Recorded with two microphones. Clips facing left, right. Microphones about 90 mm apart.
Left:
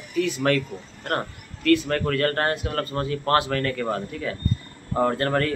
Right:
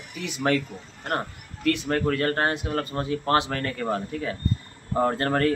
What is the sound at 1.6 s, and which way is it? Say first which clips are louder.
Speech: left 3 dB; 20° right (ahead or behind).